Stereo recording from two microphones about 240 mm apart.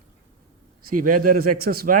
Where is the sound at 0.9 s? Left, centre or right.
Right.